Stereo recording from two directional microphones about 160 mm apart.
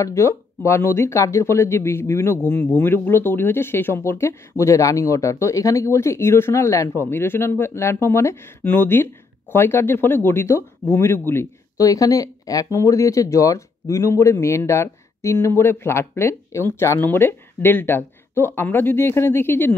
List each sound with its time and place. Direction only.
0.0 s speech: 20° left (ahead or behind)